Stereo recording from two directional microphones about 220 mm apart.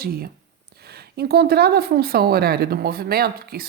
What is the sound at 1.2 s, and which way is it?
Speech, 45° right (ahead or behind).